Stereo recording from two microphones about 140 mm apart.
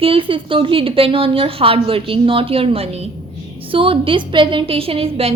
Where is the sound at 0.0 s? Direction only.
40° right (ahead or behind).